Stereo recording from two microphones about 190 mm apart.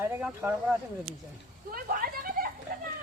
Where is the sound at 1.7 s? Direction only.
50° right (ahead or behind).